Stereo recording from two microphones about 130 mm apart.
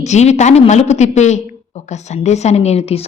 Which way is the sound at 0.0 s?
60° left (ahead or behind).